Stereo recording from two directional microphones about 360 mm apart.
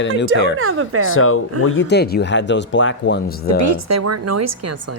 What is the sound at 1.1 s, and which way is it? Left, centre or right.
Speech, left.